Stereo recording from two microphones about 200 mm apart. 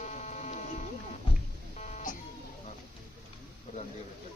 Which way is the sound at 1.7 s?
35° left (ahead or behind).